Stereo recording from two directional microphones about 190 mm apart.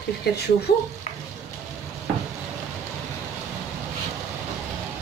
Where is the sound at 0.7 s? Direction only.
55° left (ahead or behind).